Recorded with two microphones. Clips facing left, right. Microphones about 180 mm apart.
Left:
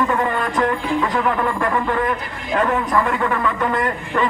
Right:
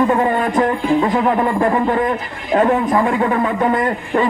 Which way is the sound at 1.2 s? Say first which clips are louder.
Right 5 dB; 30° right (ahead or behind).